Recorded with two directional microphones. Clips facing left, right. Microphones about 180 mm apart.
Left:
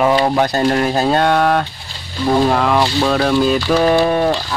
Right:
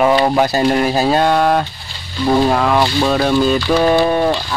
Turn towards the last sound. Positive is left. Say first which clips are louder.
# even
turn(degrees=0)  # may be behind; listen again after turning